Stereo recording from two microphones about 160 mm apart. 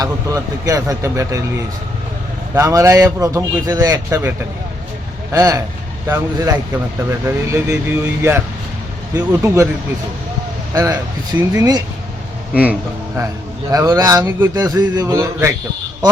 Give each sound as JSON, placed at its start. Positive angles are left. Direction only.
{"t": 0.0, "sound": "speech", "side_deg": -20}
{"t": 10.9, "sound": "speech", "side_deg": -15}
{"t": 13.7, "sound": "speech", "side_deg": -20}